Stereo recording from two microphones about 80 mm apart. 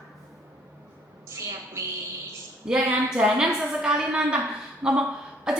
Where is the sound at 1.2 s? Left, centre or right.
Right.